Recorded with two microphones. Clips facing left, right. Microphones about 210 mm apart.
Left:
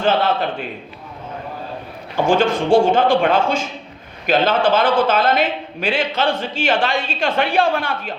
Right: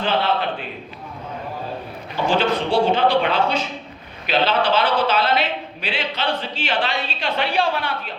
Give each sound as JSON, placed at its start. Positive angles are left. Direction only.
{"t": 2.1, "sound": "a man's voice", "side_deg": 50}